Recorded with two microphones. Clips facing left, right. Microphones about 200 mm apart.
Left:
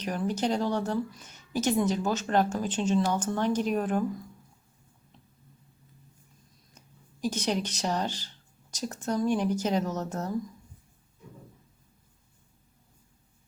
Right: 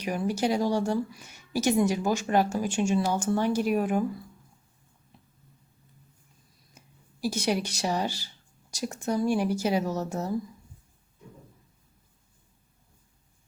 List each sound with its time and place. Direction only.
0.0 s speech: 10° right (ahead or behind)
6.7 s speech: 10° right (ahead or behind)